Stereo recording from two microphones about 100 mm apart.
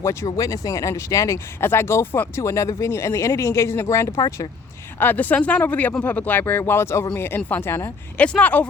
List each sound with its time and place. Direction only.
0.0 s speech: 30° left (ahead or behind)
4.9 s speech: 15° left (ahead or behind)